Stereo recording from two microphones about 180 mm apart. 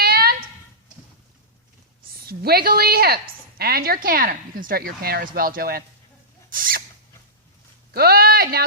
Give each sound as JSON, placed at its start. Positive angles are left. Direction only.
{"t": 0.0, "sound": "a sound", "side_deg": -60}
{"t": 2.2, "sound": "speech", "side_deg": -60}
{"t": 6.5, "sound": "rodents", "side_deg": -50}
{"t": 7.9, "sound": "speech", "side_deg": -55}